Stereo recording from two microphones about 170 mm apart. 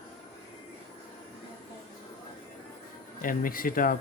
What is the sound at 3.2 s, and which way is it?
Speech, 55° left (ahead or behind).